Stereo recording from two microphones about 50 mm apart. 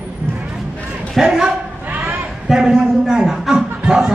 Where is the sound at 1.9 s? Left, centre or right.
Right.